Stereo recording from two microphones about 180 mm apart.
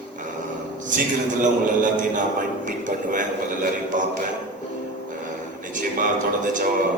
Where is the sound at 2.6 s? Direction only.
45° right (ahead or behind).